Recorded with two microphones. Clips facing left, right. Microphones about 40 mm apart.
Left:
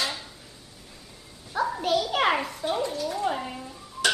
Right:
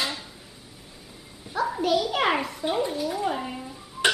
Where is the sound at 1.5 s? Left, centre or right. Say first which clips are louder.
Right 1 dB; centre.